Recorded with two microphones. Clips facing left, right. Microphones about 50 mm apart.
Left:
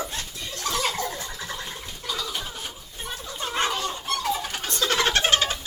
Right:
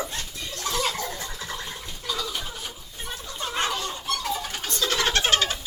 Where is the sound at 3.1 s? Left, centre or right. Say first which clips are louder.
Left 1 dB; centre.